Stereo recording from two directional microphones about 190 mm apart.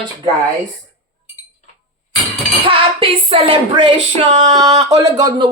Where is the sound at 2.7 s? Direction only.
30° right (ahead or behind).